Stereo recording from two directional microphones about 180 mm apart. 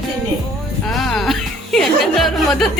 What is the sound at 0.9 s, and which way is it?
Speech, centre (ahead or behind).